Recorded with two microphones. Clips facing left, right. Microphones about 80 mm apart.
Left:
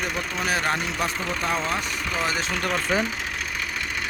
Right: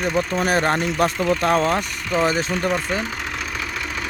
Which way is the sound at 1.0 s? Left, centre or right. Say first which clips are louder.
Right 8 dB; right.